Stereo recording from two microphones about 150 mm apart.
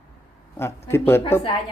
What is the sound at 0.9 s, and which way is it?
Speech, 15° left (ahead or behind).